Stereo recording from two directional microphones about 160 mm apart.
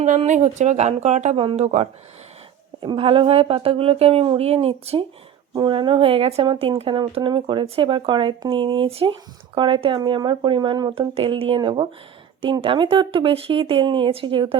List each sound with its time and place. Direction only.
0.0 s speech: 50° right (ahead or behind); by 11.1 s 25° right (ahead or behind)
11.1 s speech: 35° right (ahead or behind)